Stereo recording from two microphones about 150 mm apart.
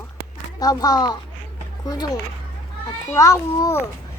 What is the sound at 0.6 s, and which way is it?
A child's voice, 25° left (ahead or behind).